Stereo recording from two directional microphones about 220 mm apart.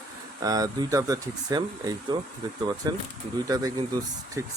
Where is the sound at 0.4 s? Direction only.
15° right (ahead or behind).